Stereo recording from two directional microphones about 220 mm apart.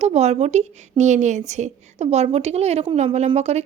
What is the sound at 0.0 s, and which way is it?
A woman's voice, 30° right (ahead or behind).